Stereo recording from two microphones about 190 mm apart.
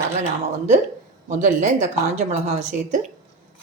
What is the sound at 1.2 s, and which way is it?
A woman's voice, 40° right (ahead or behind).